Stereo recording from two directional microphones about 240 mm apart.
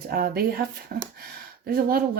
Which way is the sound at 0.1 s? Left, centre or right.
Right.